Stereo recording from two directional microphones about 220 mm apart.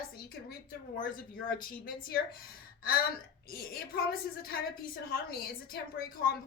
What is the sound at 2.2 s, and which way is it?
Speech, 40° left (ahead or behind).